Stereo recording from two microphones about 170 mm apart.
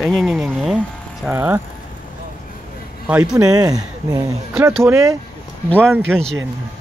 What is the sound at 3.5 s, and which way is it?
Speech, 20° right (ahead or behind).